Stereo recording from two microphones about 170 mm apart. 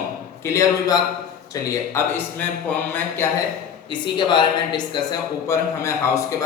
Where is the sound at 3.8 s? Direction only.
25° left (ahead or behind).